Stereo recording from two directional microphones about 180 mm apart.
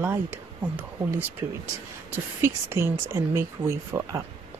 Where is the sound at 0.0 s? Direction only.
10° right (ahead or behind).